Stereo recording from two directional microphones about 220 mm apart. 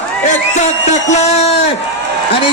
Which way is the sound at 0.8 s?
30° left (ahead or behind).